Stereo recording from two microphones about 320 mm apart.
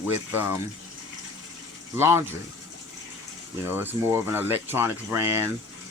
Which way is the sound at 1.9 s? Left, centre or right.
Centre.